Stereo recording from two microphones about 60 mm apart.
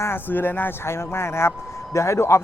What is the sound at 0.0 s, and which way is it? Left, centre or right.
Speech, left.